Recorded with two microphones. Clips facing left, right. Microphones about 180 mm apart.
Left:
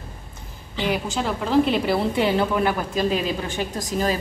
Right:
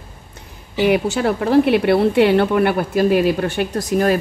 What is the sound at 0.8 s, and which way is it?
A woman's voice, 65° right (ahead or behind).